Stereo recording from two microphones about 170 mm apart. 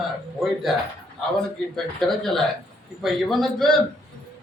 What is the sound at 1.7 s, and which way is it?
A man's voice, centre (ahead or behind).